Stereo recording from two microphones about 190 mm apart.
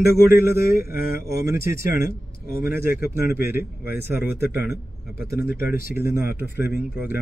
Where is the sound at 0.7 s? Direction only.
50° left (ahead or behind).